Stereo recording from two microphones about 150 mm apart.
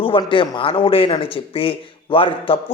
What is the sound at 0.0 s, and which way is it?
A man's voice, 35° left (ahead or behind).